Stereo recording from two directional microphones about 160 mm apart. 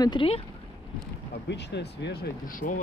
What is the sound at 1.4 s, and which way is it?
Speech, 90° left.